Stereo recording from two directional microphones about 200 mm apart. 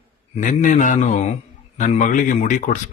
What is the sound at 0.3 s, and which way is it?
Speech, 40° left (ahead or behind).